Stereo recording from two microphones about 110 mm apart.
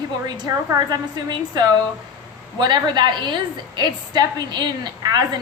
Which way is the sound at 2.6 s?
40° right (ahead or behind).